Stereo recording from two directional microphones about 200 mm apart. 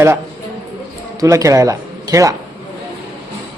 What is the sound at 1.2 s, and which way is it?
Speech, 15° right (ahead or behind).